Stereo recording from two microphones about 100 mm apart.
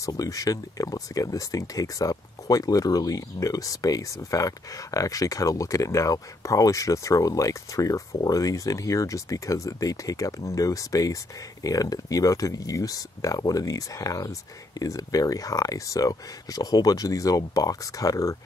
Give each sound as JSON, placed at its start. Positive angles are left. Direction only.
{"t": 0.0, "sound": "speech", "side_deg": 35}